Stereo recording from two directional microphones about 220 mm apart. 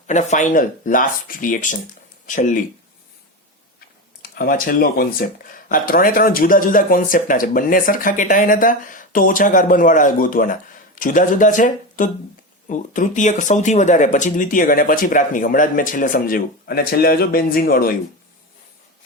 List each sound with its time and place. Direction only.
0.1 s speech: 35° left (ahead or behind)
4.2 s speech: 40° left (ahead or behind)